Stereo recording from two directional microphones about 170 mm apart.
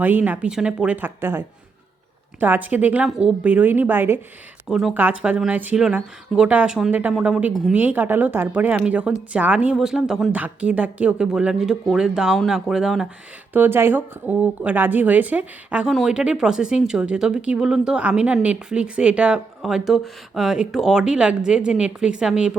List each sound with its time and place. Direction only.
0.0 s a woman's voice: 10° right (ahead or behind)
4.7 s a woman's voice: centre (ahead or behind)